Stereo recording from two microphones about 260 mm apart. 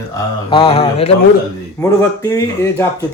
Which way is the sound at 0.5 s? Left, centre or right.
Left.